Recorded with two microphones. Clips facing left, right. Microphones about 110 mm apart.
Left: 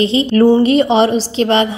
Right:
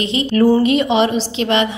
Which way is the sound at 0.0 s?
30° left (ahead or behind).